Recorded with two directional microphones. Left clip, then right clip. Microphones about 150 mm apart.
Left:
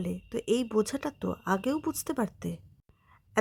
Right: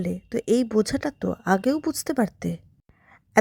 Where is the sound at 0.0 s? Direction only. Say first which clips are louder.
Right 6 dB; 20° right (ahead or behind).